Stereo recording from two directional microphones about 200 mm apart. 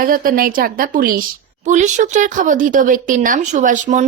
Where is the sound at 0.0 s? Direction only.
45° right (ahead or behind).